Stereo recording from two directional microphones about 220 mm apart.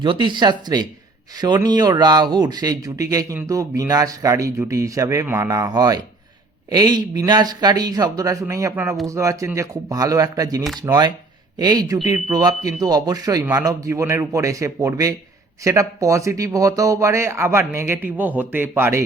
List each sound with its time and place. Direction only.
0.0 s speech: 20° right (ahead or behind)